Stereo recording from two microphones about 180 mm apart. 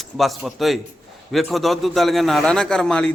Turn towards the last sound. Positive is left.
turn(degrees=5)  # may be behind; listen again after turning